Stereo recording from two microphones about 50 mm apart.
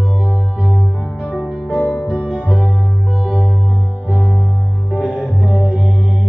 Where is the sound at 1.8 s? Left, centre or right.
Left.